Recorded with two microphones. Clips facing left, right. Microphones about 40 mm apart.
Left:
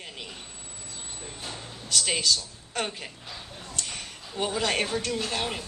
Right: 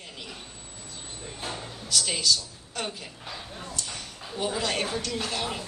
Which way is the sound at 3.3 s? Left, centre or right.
Right.